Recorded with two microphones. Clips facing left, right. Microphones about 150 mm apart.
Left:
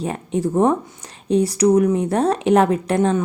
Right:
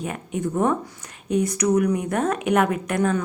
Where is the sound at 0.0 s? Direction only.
30° left (ahead or behind).